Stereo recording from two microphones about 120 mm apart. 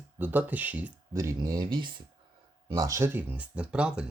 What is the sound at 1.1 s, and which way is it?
Speech, 25° right (ahead or behind).